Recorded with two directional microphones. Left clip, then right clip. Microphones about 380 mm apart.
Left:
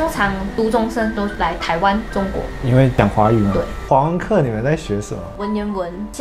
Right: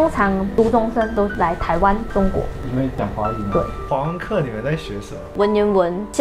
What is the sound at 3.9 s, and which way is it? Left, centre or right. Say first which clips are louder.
Speech: left 6 dB; left.